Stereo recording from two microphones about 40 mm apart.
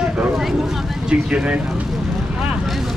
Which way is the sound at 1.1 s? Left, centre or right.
Right.